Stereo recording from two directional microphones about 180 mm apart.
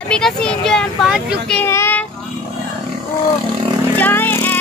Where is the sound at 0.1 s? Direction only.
5° left (ahead or behind).